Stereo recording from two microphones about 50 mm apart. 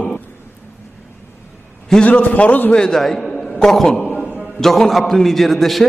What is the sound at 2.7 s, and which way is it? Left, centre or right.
A man's voice, centre.